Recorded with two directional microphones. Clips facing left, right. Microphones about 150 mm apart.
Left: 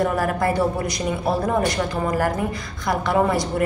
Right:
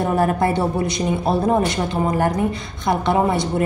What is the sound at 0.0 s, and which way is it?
A woman's voice, 25° right (ahead or behind).